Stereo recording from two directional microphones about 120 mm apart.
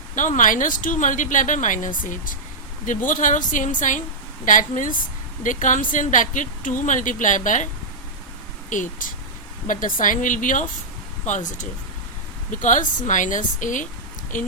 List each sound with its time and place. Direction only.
0.2 s speech: 90° left
8.7 s speech: 90° left